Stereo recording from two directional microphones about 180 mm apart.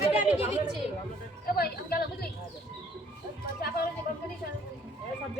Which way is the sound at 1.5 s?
60° left (ahead or behind).